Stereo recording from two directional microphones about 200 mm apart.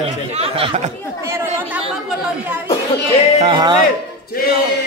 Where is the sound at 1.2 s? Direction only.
10° right (ahead or behind).